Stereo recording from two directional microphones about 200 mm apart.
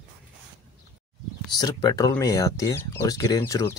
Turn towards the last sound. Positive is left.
turn(degrees=15)  # may be behind; listen again after turning